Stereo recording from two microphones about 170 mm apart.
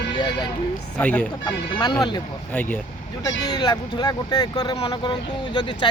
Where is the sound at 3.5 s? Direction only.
25° left (ahead or behind).